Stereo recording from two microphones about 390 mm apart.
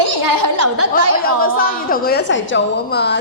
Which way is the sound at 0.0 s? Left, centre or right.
Right.